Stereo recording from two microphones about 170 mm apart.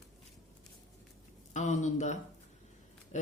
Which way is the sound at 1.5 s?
45° left (ahead or behind).